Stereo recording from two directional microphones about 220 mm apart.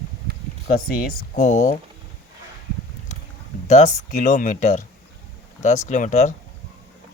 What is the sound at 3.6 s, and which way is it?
Speech, 30° left (ahead or behind).